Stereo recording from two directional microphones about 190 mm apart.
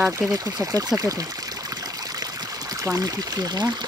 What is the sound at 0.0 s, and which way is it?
Pour, 15° right (ahead or behind).